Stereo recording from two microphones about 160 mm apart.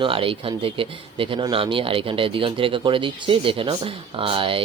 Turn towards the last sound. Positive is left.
turn(degrees=-35)  # may be behind; listen again after turning